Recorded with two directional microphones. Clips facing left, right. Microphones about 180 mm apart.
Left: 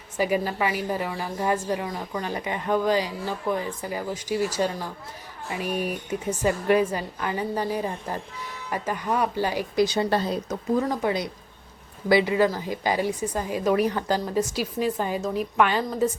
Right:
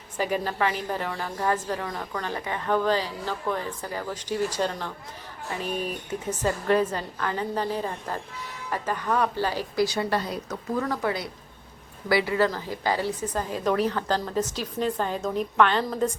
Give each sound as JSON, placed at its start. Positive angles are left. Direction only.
{"t": 0.2, "sound": "a woman's voice", "side_deg": 10}